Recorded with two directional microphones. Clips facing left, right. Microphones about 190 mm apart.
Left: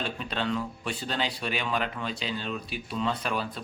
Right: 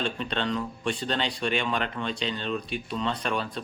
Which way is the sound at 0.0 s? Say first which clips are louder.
Right 2 dB; 5° left (ahead or behind).